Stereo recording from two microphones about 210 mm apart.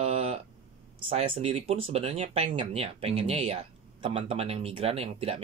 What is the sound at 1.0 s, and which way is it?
Speech, 30° right (ahead or behind).